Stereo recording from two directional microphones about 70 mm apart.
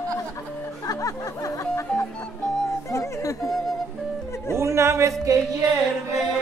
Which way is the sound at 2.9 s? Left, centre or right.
Left.